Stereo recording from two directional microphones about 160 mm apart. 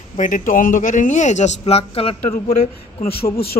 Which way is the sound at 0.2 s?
55° left (ahead or behind).